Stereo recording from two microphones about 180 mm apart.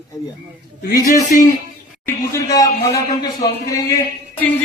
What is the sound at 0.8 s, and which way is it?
Speech, 55° left (ahead or behind).